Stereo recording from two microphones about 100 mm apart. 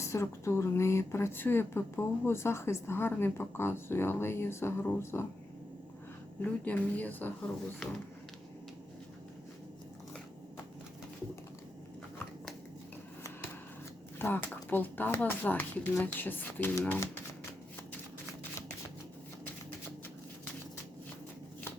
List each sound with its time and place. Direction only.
0.0 s speech: 30° left (ahead or behind)
6.4 s speech: 15° left (ahead or behind)
14.2 s speech: 20° left (ahead or behind)